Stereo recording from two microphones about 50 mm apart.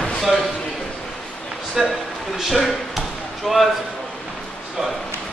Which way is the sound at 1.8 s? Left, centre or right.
Centre.